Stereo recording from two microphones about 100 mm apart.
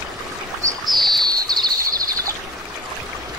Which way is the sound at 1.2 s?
45° right (ahead or behind).